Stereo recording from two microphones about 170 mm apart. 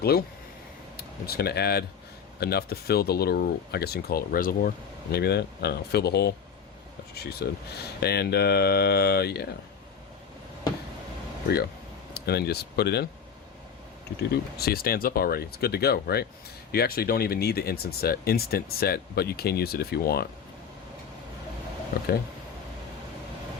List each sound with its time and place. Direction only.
0.0 s speech: 65° left (ahead or behind)
5.1 s speech: 70° left (ahead or behind)
12.1 s speech: 70° left (ahead or behind)
14.2 s speech: 65° left (ahead or behind)